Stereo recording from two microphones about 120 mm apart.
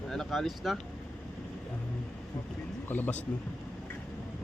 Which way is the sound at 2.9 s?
15° left (ahead or behind).